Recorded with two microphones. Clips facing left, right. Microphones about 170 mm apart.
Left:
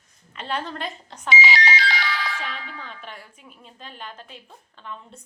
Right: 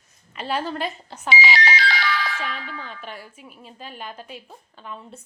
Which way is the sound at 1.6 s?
55° right (ahead or behind).